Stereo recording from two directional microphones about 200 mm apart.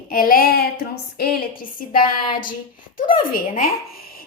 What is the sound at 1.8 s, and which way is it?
Speech, 45° left (ahead or behind).